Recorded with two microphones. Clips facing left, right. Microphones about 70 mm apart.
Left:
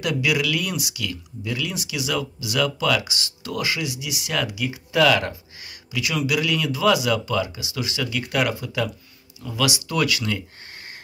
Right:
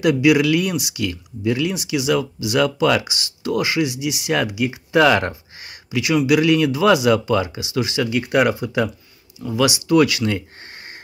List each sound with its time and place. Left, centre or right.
0.0 s speech: right
5.9 s speech: right